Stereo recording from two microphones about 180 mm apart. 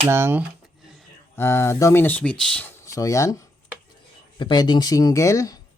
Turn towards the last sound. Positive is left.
turn(degrees=15)  # may be behind; listen again after turning